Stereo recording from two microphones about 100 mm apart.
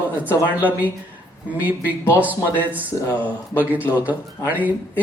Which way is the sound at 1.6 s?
15° right (ahead or behind).